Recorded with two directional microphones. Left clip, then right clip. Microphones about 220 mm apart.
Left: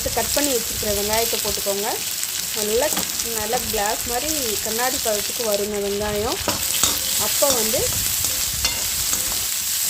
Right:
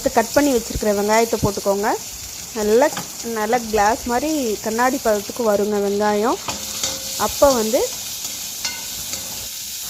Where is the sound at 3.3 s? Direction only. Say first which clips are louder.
Right 7 dB; 25° right (ahead or behind).